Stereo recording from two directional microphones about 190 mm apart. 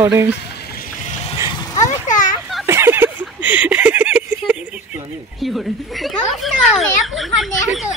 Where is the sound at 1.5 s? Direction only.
20° left (ahead or behind).